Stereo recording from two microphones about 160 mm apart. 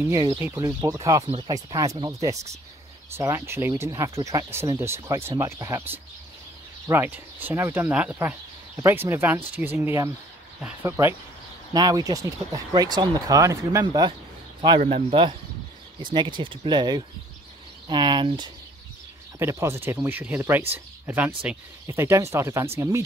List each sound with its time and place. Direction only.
0.0 s speech: 20° right (ahead or behind)
15.0 s speech: 30° right (ahead or behind)
19.3 s speech: 15° right (ahead or behind)